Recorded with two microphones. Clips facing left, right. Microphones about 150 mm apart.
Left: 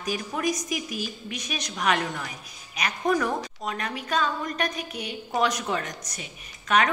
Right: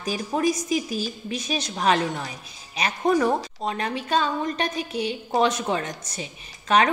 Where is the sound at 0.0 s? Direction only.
30° right (ahead or behind).